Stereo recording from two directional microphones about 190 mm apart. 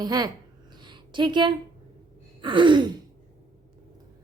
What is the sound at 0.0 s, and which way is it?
Speech, 20° right (ahead or behind).